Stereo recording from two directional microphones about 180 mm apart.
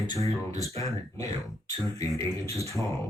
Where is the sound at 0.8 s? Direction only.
20° left (ahead or behind).